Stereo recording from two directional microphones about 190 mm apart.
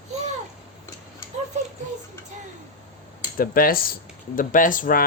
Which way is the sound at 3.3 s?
50° left (ahead or behind).